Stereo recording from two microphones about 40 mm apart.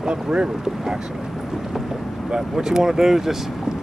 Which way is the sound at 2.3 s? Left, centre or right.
Centre.